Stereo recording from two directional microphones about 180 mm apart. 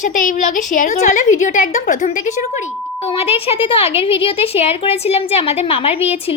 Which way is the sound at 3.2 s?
35° left (ahead or behind).